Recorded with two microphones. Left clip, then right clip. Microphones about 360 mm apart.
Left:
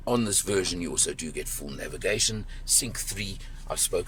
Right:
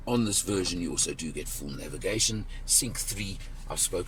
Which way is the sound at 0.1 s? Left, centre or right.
Centre.